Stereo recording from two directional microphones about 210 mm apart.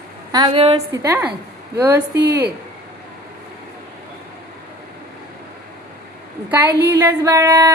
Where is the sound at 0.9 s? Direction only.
15° right (ahead or behind).